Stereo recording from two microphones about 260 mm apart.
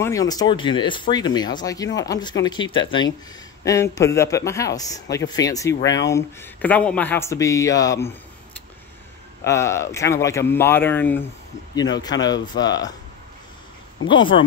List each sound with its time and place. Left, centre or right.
0.0 s speech: centre
9.4 s speech: centre
14.0 s speech: centre